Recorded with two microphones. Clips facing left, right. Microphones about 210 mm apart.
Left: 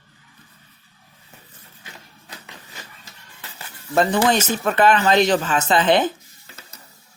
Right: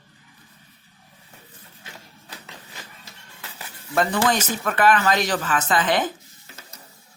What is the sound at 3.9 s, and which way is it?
Speech, 25° left (ahead or behind).